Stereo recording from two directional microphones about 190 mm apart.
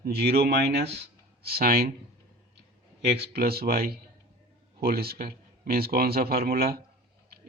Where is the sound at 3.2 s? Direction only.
55° right (ahead or behind).